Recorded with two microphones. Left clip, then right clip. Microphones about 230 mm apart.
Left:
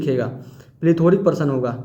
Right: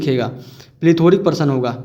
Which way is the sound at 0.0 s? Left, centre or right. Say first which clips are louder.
Right 3 dB; right.